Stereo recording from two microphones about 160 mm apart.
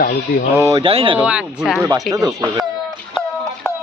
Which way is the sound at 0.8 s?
35° right (ahead or behind).